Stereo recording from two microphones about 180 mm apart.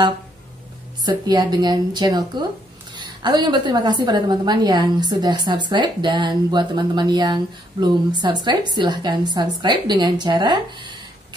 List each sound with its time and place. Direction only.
1.0 s a woman's voice: 25° right (ahead or behind)